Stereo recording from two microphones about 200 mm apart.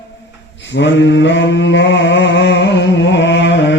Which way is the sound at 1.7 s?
65° left (ahead or behind).